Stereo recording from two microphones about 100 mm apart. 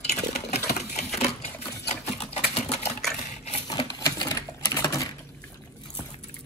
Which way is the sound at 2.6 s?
90° left.